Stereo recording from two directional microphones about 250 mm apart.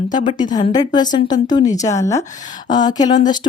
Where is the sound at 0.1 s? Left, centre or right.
Centre.